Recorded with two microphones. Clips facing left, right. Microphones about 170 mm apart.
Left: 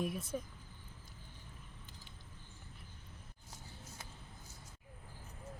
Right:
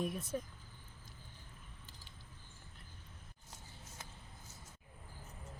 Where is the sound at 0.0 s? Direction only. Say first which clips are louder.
Even; centre (ahead or behind).